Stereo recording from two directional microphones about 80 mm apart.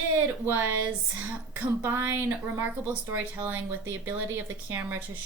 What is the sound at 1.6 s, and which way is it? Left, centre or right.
Speech, right.